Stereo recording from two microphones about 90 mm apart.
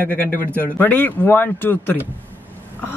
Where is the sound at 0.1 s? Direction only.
20° left (ahead or behind).